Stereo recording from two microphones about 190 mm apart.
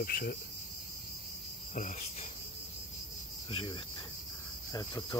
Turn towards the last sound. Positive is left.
turn(degrees=20)  # may be behind; listen again after turning